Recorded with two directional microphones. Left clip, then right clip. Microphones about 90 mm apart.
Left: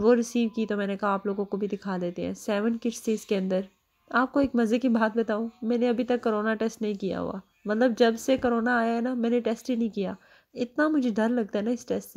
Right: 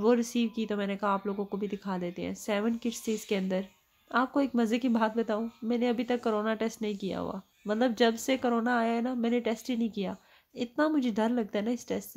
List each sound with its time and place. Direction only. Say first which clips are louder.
0.0 s a woman's voice: left 4 dB; 40° left (ahead or behind)